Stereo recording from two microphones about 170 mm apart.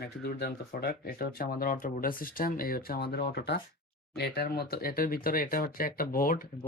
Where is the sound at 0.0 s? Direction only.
75° left (ahead or behind).